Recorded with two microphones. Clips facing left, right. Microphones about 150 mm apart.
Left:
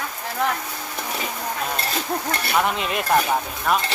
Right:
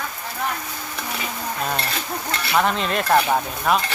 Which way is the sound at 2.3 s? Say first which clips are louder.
Left 1 dB; 50° left (ahead or behind).